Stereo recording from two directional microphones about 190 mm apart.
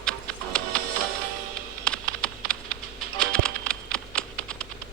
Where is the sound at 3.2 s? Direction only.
5° left (ahead or behind).